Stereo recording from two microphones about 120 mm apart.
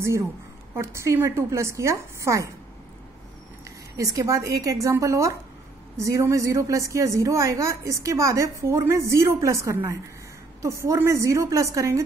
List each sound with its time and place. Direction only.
0.7 s a woman's voice: 25° right (ahead or behind)
3.9 s a woman's voice: 30° right (ahead or behind)